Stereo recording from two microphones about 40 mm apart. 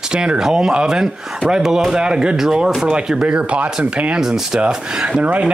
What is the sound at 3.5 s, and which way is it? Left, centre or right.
Speech, right.